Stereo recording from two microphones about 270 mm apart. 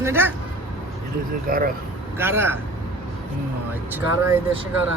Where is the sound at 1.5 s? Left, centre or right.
Right.